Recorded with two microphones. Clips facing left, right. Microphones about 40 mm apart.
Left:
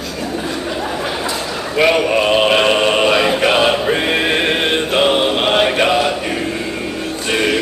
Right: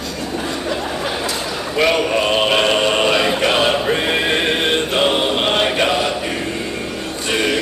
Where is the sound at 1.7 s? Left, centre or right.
Centre.